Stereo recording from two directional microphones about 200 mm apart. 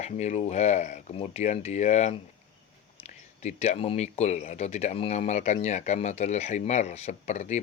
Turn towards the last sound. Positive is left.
turn(degrees=35)  # may be behind; listen again after turning